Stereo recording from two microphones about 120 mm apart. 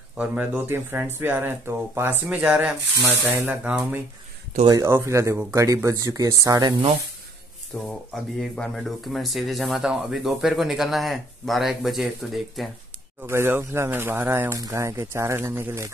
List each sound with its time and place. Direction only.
0.2 s speech: 15° right (ahead or behind)
4.6 s speech: 25° right (ahead or behind)
7.7 s speech: 5° left (ahead or behind)
13.3 s speech: 20° right (ahead or behind)